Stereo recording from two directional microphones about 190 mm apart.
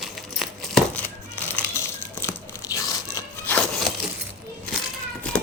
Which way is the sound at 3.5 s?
5° left (ahead or behind).